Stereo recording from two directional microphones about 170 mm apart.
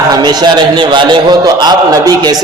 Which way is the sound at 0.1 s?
25° right (ahead or behind).